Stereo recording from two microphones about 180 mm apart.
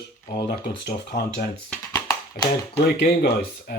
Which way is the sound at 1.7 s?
20° left (ahead or behind).